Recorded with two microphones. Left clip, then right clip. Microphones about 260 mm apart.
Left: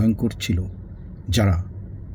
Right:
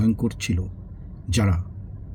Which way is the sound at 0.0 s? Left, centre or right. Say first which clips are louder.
Left 1 dB; centre.